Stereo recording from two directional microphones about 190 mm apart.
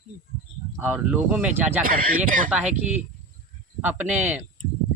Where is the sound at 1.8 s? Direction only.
45° right (ahead or behind).